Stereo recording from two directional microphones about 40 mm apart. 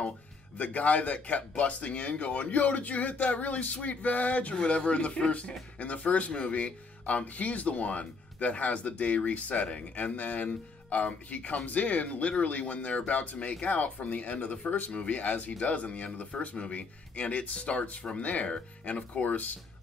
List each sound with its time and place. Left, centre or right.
0.6 s speech: left
19.2 s speech: left